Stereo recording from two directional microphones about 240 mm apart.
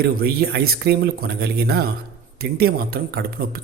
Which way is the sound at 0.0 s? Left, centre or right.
Right.